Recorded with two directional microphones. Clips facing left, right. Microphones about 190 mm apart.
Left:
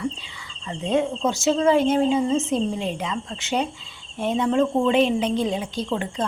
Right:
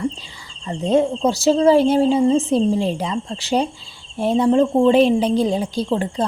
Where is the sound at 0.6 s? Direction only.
35° right (ahead or behind).